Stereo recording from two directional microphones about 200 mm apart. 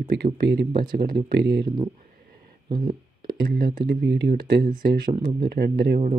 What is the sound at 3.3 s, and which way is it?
Speech, 50° right (ahead or behind).